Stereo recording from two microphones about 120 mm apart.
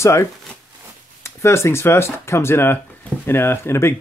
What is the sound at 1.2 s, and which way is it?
Speech, 20° left (ahead or behind).